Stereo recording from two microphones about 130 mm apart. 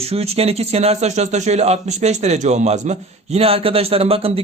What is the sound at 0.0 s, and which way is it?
Speech, 50° right (ahead or behind).